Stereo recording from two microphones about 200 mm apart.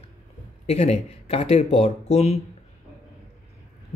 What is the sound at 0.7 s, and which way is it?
Speech, 35° left (ahead or behind).